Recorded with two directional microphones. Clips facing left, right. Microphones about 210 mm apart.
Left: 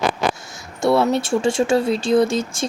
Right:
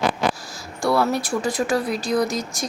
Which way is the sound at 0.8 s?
25° left (ahead or behind).